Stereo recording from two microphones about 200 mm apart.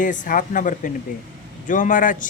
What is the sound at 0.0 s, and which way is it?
Speech, 40° left (ahead or behind).